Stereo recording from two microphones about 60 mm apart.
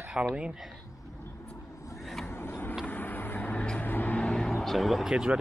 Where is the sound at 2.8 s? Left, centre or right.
Left.